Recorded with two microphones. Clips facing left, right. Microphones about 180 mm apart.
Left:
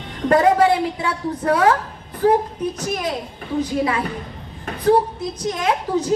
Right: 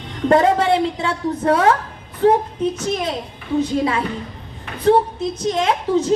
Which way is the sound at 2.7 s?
25° right (ahead or behind).